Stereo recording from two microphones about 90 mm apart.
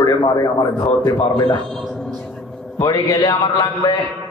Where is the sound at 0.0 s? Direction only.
50° left (ahead or behind).